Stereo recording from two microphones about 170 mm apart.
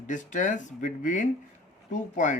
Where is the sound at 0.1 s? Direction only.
45° left (ahead or behind).